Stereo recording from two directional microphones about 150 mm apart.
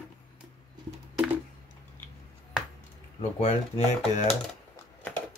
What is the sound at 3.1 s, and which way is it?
Speech, 45° left (ahead or behind).